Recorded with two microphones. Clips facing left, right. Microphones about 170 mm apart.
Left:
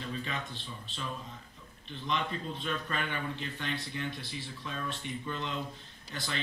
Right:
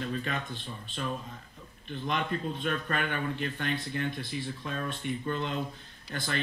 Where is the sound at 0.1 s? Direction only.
50° right (ahead or behind).